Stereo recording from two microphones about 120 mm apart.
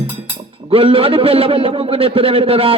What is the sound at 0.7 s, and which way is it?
A man's voice, 50° right (ahead or behind).